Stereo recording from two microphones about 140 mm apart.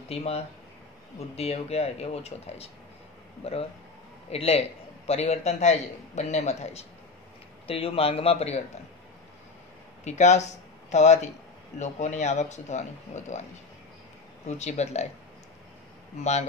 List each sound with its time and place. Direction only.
0.1 s a man's voice: 45° left (ahead or behind)
10.0 s speech: 55° left (ahead or behind)
14.5 s a man's voice: 55° left (ahead or behind)